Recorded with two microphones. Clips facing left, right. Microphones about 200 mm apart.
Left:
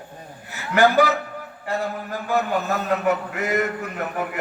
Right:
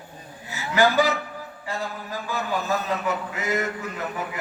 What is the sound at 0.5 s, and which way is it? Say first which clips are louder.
A man's voice: left 3 dB; 60° left (ahead or behind).